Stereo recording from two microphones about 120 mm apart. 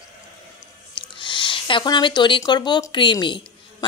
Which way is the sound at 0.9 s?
40° left (ahead or behind).